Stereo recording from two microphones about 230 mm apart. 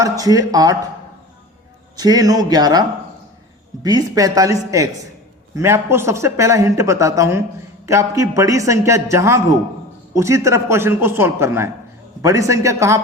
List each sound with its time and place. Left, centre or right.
0.0 s speech: centre
2.0 s speech: centre
3.8 s speech: centre